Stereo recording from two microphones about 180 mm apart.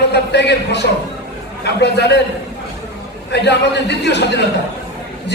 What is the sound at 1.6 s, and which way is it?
Speech, 70° left (ahead or behind).